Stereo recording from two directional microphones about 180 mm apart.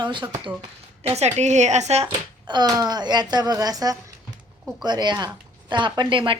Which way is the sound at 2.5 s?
20° right (ahead or behind).